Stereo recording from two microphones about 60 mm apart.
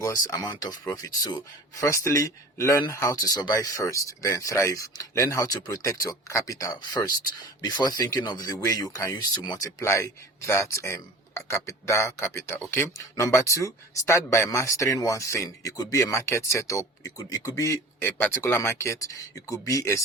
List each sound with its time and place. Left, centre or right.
0.0 s speech: left
9.8 s speech: left
13.1 s speech: left
18.0 s speech: left